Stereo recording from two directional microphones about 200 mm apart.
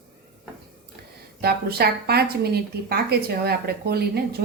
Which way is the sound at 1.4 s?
50° right (ahead or behind).